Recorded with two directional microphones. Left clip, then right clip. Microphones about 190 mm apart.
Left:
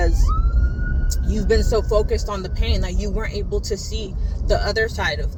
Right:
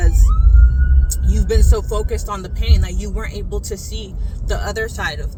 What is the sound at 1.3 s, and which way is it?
Speech, 20° right (ahead or behind).